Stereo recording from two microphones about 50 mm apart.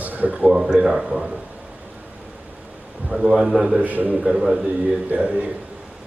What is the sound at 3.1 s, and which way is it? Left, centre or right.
Speech, centre.